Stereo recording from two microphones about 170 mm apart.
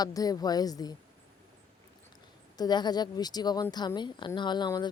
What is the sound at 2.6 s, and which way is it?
Speech, 25° left (ahead or behind).